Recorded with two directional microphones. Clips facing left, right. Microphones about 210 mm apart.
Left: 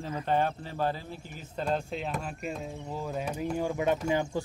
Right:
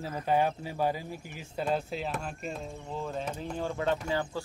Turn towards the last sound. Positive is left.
turn(degrees=20)  # may be behind; listen again after turning